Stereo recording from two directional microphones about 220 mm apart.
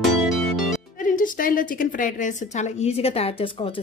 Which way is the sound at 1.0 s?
40° left (ahead or behind).